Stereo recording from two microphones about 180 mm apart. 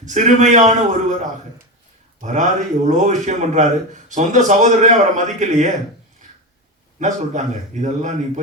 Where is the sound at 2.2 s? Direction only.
45° right (ahead or behind).